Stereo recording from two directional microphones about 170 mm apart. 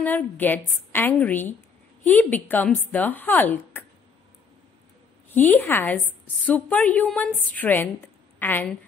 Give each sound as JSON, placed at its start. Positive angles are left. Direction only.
{"t": 0.0, "sound": "a woman's voice", "side_deg": 10}
{"t": 5.3, "sound": "a woman's voice", "side_deg": 10}